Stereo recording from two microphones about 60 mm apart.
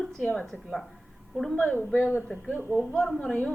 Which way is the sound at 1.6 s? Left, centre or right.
Left.